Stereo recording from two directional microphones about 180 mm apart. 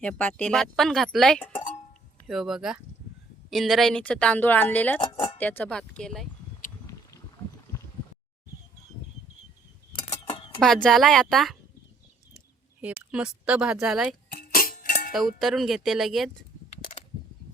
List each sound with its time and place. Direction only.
0.0 s a woman's voice: 10° left (ahead or behind)
10.2 s a sound: 30° left (ahead or behind)
10.6 s speech: centre (ahead or behind)
12.8 s speech: 5° right (ahead or behind)
14.3 s music: 55° left (ahead or behind)
15.1 s speech: centre (ahead or behind)